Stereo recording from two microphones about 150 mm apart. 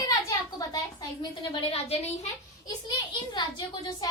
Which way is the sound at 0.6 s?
30° left (ahead or behind).